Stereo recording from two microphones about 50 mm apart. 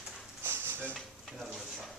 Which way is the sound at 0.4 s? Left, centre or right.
Right.